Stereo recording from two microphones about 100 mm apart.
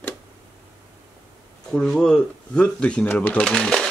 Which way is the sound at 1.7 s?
5° left (ahead or behind).